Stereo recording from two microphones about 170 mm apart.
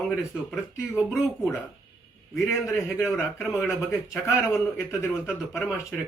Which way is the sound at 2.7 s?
Centre (ahead or behind).